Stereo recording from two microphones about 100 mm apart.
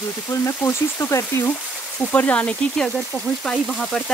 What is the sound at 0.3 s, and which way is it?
Speech, 30° left (ahead or behind).